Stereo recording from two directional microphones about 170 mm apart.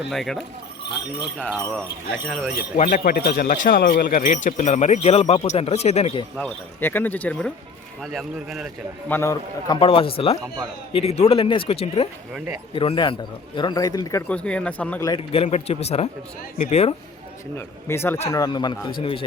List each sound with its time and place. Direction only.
0.1 s speech: centre (ahead or behind)
2.2 s speech: centre (ahead or behind)
2.7 s speech: 50° left (ahead or behind)
6.3 s speech: 10° left (ahead or behind)
9.0 s speech: 15° left (ahead or behind)
9.7 s speech: 30° left (ahead or behind)
14.3 s speech: 5° left (ahead or behind)
15.3 s speech: 40° left (ahead or behind)
17.8 s speech: 15° left (ahead or behind)